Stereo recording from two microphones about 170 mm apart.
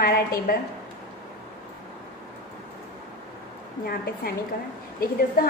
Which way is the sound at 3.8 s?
60° left (ahead or behind).